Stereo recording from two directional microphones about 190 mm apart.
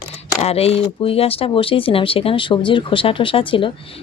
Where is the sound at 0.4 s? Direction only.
30° left (ahead or behind).